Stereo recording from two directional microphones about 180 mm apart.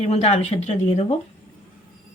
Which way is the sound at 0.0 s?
35° left (ahead or behind).